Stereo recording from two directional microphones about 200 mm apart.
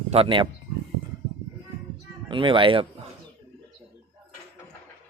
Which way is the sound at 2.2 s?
25° right (ahead or behind).